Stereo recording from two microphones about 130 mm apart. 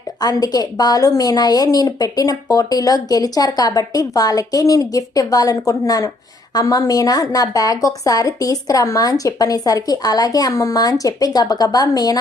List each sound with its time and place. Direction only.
0.2 s a woman's voice: 30° left (ahead or behind)